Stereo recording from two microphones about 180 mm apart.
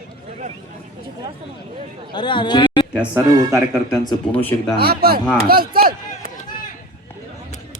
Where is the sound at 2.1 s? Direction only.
25° left (ahead or behind).